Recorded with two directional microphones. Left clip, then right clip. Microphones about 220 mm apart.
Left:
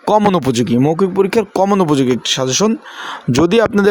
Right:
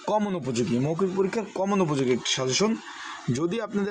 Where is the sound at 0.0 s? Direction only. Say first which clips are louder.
Left 14 dB; 40° left (ahead or behind).